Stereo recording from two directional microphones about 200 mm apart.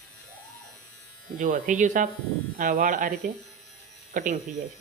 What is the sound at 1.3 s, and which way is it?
Speech, 40° right (ahead or behind).